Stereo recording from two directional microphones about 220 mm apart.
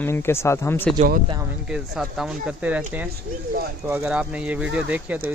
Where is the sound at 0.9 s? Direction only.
40° right (ahead or behind).